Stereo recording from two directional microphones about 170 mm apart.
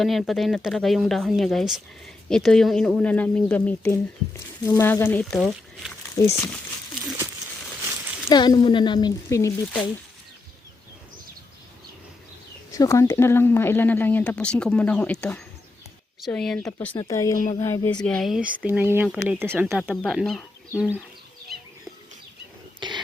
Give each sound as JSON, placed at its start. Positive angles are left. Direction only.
{"t": 0.0, "sound": "speech", "side_deg": 0}
{"t": 5.3, "sound": "speech", "side_deg": 0}
{"t": 6.1, "sound": "speech", "side_deg": 20}
{"t": 8.3, "sound": "speech", "side_deg": 25}
{"t": 12.7, "sound": "speech", "side_deg": 20}
{"t": 16.9, "sound": "speech", "side_deg": 20}
{"t": 17.3, "sound": "speech", "side_deg": 50}
{"t": 17.6, "sound": "speech", "side_deg": 15}
{"t": 19.9, "sound": "speech", "side_deg": 0}